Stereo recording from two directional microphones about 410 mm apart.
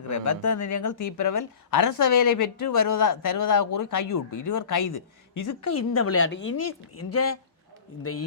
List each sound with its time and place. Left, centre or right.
0.1 s speech: left